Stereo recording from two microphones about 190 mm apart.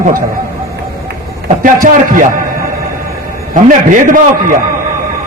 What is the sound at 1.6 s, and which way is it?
Speech, 45° right (ahead or behind).